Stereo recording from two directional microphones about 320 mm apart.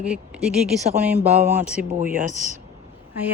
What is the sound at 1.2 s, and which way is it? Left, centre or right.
Speech, right.